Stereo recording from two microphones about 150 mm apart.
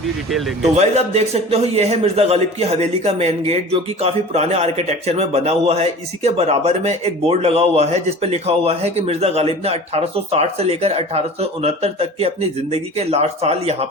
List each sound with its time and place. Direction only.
0.3 s speech: centre (ahead or behind)
0.8 s a man's voice: 45° right (ahead or behind)